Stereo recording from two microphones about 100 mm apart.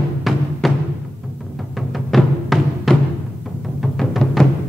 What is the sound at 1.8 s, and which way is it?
Music, centre (ahead or behind).